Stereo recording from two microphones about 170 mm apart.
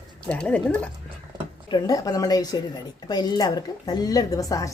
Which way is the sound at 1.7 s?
25° left (ahead or behind).